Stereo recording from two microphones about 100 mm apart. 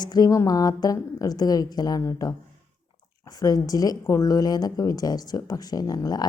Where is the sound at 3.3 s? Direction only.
40° left (ahead or behind).